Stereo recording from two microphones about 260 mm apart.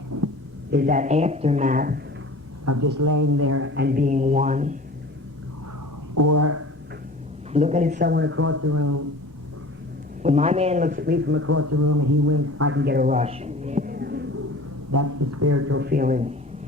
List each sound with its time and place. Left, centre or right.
0.1 s hum: right
0.7 s speech: right
2.6 s a woman's voice: right
3.8 s speech: right
6.1 s speech: right
7.5 s speech: right
10.2 s speech: right
12.8 s a man's voice: right
14.9 s speech: right
15.8 s a man's voice: right